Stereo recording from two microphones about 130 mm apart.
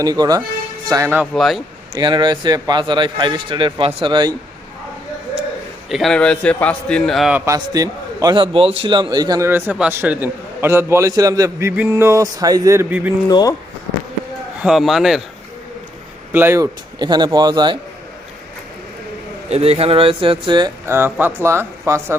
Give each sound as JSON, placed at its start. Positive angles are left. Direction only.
{"t": 0.0, "sound": "a man's voice", "side_deg": -30}
{"t": 1.3, "sound": "a man's voice", "side_deg": 0}
{"t": 2.0, "sound": "a man's voice", "side_deg": -35}
{"t": 5.9, "sound": "a man's voice", "side_deg": 0}
{"t": 7.3, "sound": "a man's voice", "side_deg": -25}
{"t": 8.4, "sound": "a man's voice", "side_deg": -45}
{"t": 9.5, "sound": "a man's voice", "side_deg": -15}
{"t": 13.2, "sound": "speech", "side_deg": 30}
{"t": 14.6, "sound": "a man's voice", "side_deg": -5}
{"t": 16.3, "sound": "speech", "side_deg": -20}
{"t": 17.0, "sound": "a man's voice", "side_deg": -35}
{"t": 19.5, "sound": "speech", "side_deg": -55}
{"t": 20.8, "sound": "a man's voice", "side_deg": -20}